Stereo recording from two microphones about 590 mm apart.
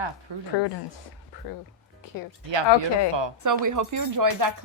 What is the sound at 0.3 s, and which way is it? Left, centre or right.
Speech, right.